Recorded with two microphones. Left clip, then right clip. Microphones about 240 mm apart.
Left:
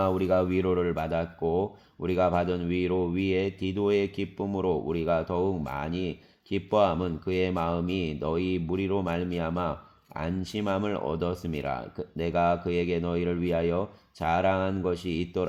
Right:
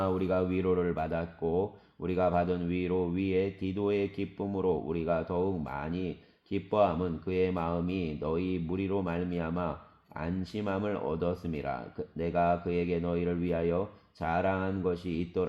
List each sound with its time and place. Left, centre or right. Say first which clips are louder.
0.0 s speech: left 5 dB; left